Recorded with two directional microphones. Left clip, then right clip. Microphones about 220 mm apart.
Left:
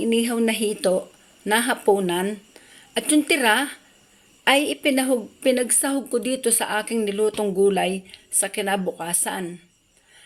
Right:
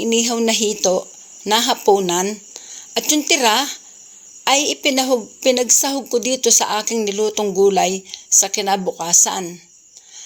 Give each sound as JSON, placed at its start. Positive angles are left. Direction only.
{"t": 0.0, "sound": "a woman's voice", "side_deg": -20}